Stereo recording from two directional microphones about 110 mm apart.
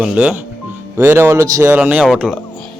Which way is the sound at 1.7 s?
15° right (ahead or behind).